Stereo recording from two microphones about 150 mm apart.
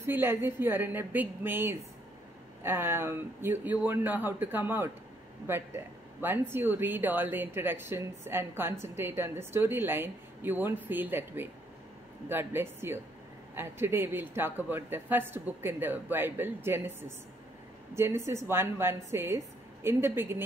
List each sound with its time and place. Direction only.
0.0 s a woman's voice: 15° right (ahead or behind)
17.9 s a woman's voice: 15° right (ahead or behind)